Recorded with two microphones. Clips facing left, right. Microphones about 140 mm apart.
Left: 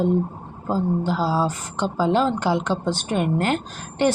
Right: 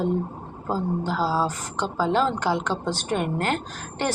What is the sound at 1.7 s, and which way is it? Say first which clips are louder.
A woman's voice: left 3 dB; 25° left (ahead or behind).